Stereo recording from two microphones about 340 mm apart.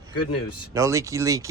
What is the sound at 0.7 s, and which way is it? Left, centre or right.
Speech, centre.